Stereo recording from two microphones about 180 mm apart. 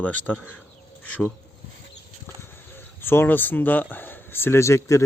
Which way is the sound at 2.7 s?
10° left (ahead or behind).